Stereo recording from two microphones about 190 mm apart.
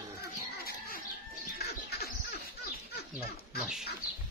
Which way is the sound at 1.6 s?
55° left (ahead or behind).